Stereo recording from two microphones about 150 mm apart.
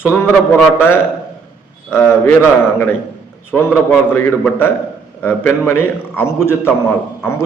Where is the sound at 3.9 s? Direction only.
15° left (ahead or behind).